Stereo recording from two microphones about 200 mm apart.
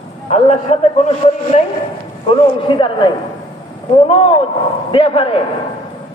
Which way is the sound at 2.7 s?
25° left (ahead or behind).